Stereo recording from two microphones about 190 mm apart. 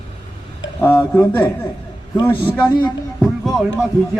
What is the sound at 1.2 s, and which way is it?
Speech, 10° left (ahead or behind).